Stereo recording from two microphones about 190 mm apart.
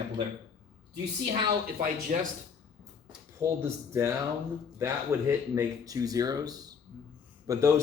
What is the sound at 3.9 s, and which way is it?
Speech, 15° right (ahead or behind).